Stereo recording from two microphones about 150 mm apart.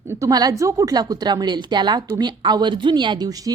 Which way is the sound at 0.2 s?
25° right (ahead or behind).